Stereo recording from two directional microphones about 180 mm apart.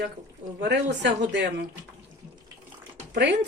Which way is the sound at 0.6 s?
70° right (ahead or behind).